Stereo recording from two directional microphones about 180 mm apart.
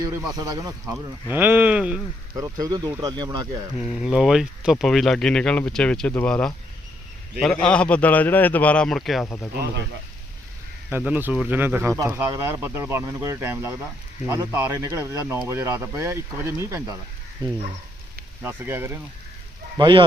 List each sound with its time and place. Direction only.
0.3 s speech: 15° right (ahead or behind)
2.3 s speech: 20° right (ahead or behind)
3.8 s a man's voice: centre (ahead or behind)
10.8 s speech: 10° right (ahead or behind)
18.4 s speech: 10° right (ahead or behind)
19.7 s speech: 25° right (ahead or behind)